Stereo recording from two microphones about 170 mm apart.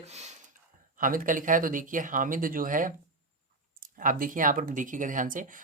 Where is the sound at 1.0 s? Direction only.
55° right (ahead or behind).